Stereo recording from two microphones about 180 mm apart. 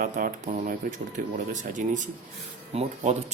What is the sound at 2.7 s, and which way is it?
Speech, 40° right (ahead or behind).